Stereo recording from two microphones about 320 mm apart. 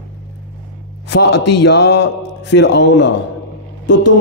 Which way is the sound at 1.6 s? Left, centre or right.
Left.